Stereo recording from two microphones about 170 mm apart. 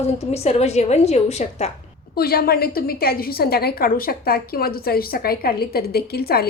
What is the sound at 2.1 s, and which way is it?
A woman's voice, 65° left (ahead or behind).